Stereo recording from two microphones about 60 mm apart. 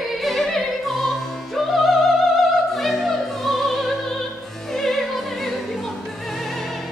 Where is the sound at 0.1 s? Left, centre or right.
Centre.